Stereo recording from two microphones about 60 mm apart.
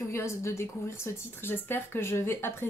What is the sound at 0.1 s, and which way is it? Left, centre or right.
A woman's voice, left.